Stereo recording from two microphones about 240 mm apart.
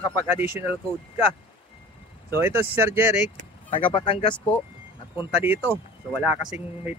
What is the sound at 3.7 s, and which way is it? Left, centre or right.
Speech, left.